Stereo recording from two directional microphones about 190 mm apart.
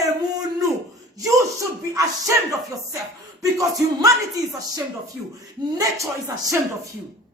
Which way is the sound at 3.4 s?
15° right (ahead or behind).